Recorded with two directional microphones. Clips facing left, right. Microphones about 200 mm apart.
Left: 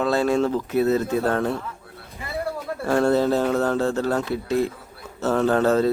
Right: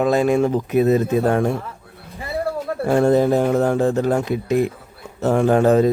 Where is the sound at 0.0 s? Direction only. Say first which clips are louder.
Right 4 dB; 15° right (ahead or behind).